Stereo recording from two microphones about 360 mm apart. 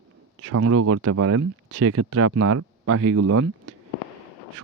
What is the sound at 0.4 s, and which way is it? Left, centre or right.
Speech, right.